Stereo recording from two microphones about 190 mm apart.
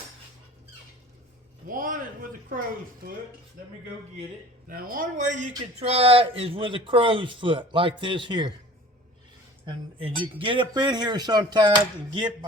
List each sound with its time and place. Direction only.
1.6 s a sound: 45° right (ahead or behind)
4.7 s speech: 50° right (ahead or behind); by 8.5 s 25° right (ahead or behind)
9.6 s speech: 25° right (ahead or behind)